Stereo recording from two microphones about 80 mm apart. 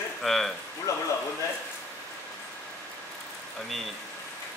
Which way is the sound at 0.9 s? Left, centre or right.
Left.